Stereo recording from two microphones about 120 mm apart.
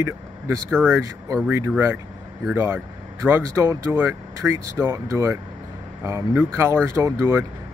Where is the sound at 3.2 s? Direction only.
20° right (ahead or behind).